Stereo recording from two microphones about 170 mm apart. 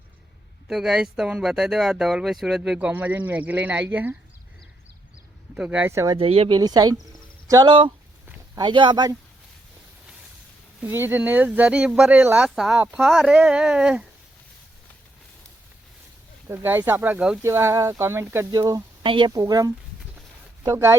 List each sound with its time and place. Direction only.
0.7 s speech: centre (ahead or behind)
5.5 s speech: 10° right (ahead or behind)
6.1 s speech: 35° right (ahead or behind)
6.6 s speech: 20° right (ahead or behind)
10.8 s speech: 10° right (ahead or behind)
16.5 s speech: 15° right (ahead or behind)